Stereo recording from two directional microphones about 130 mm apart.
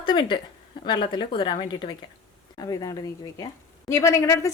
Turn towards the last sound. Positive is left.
turn(degrees=25)  # may be behind; listen again after turning